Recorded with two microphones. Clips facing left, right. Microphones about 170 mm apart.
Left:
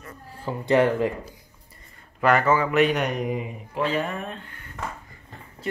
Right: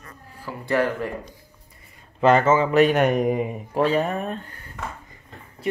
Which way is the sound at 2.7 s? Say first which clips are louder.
Right 4 dB; 45° right (ahead or behind).